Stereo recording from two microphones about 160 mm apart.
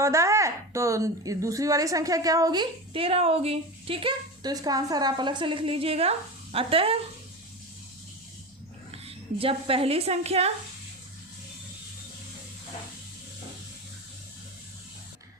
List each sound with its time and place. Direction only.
0.0 s a woman's voice: 20° right (ahead or behind); by 7.0 s 35° right (ahead or behind)
8.9 s a woman's voice: 35° right (ahead or behind)